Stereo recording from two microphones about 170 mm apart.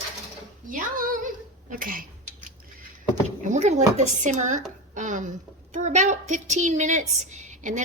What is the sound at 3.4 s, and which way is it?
A woman's voice, 45° right (ahead or behind).